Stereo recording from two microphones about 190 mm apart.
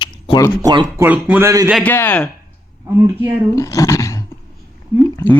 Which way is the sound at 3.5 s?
15° left (ahead or behind).